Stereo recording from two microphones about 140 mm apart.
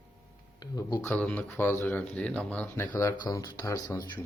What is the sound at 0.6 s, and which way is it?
Speech, 25° left (ahead or behind).